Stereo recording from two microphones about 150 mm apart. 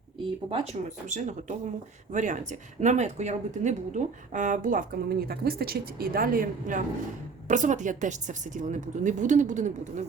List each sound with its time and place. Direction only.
0.5 s speech: 45° right (ahead or behind)